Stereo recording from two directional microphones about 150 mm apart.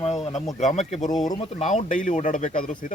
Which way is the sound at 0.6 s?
55° left (ahead or behind).